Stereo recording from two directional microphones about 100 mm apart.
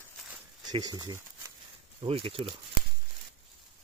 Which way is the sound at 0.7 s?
40° right (ahead or behind).